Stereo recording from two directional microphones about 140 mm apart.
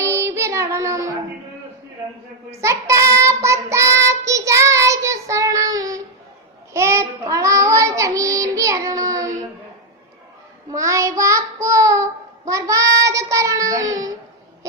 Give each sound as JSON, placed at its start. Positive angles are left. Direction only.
{"t": 0.0, "sound": "child singing", "side_deg": -20}
{"t": 2.5, "sound": "child singing", "side_deg": -20}
{"t": 10.7, "sound": "child singing", "side_deg": -20}